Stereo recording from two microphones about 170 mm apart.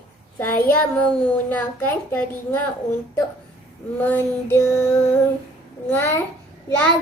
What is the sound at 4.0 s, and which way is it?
A child's voice, 10° left (ahead or behind).